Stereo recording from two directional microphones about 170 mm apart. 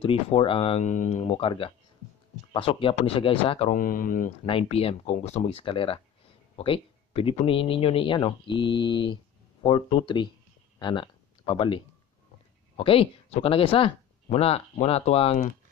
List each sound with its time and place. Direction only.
0.0 s speech: 30° left (ahead or behind)
3.7 s speech: 55° left (ahead or behind)
4.5 s speech: 35° left (ahead or behind)